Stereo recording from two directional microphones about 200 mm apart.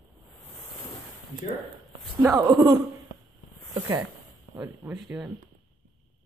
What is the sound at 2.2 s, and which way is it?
Speech, 15° right (ahead or behind).